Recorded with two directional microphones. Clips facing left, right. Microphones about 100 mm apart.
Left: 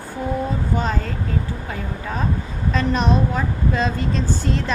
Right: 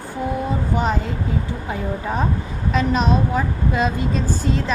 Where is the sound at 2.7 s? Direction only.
5° right (ahead or behind).